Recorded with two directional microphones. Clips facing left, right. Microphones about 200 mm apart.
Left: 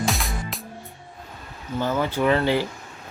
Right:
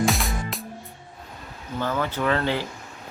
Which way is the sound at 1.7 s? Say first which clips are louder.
Left 3 dB; 15° left (ahead or behind).